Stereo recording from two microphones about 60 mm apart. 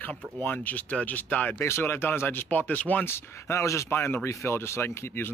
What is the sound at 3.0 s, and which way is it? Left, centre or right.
Speech, left.